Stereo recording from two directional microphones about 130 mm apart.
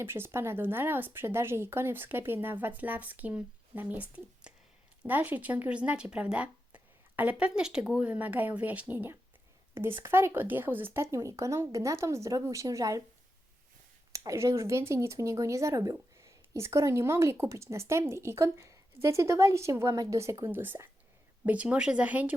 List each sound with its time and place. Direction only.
0.0 s speech: 20° right (ahead or behind)
14.1 s speech: 25° right (ahead or behind)